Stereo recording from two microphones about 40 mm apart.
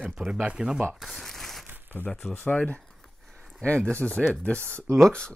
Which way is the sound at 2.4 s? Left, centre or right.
Left.